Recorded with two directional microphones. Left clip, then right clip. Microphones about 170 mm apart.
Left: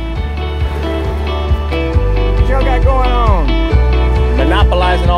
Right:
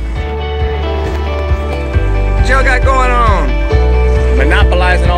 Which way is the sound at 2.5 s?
Centre (ahead or behind).